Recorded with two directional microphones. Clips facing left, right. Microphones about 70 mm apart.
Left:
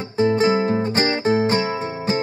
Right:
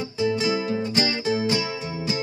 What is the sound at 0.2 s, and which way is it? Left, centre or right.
Music, left.